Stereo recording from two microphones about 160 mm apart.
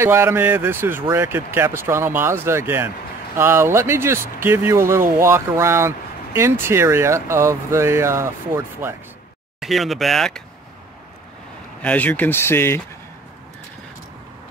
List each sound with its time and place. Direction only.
0.0 s speech: 15° right (ahead or behind)
9.6 s speech: centre (ahead or behind)
11.8 s speech: 10° left (ahead or behind)